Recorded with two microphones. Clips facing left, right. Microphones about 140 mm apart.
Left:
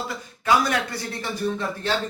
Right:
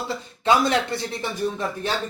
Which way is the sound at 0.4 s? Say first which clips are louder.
Right 2 dB; 25° right (ahead or behind).